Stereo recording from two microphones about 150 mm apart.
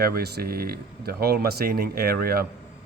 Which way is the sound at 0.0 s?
90° right.